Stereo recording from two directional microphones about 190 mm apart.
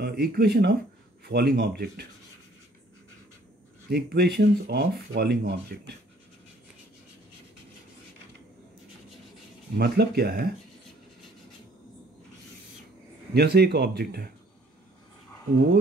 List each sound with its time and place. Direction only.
0.0 s speech: 55° right (ahead or behind)
3.9 s speech: 60° right (ahead or behind)
9.8 s speech: 60° right (ahead or behind)
13.3 s speech: 60° right (ahead or behind)